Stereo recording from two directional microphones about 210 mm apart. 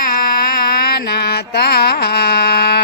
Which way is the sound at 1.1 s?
50° left (ahead or behind).